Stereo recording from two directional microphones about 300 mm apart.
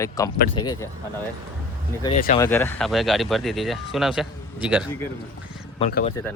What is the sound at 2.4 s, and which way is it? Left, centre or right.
Speech, centre.